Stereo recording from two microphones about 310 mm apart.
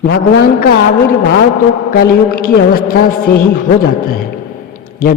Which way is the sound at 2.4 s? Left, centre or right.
Left.